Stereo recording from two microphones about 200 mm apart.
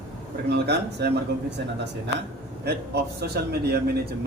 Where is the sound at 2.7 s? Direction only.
55° right (ahead or behind).